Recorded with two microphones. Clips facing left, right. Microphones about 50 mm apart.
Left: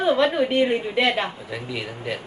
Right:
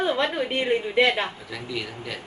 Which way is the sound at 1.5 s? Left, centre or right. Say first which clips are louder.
Left 2 dB; left.